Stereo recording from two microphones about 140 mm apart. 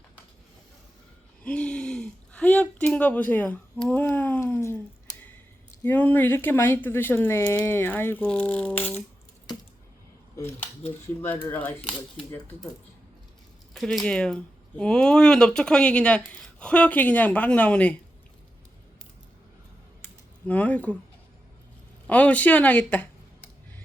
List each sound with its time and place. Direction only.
1.5 s a sound: 10° left (ahead or behind)
5.8 s speech: 15° left (ahead or behind)
10.3 s speech: 15° left (ahead or behind)
13.7 s speech: centre (ahead or behind)
20.5 s speech: 10° left (ahead or behind)
22.0 s speech: 10° left (ahead or behind)